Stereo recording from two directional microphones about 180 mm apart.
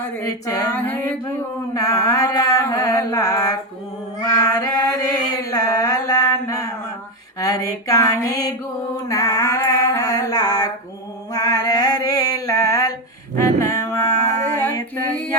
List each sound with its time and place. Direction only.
0.2 s a sound: 15° left (ahead or behind)
1.7 s mantra: 20° left (ahead or behind)
4.4 s female singing: 20° left (ahead or behind)
5.3 s mantra: 20° left (ahead or behind)
9.0 s a sound: 20° left (ahead or behind)
13.3 s livestock: 15° left (ahead or behind)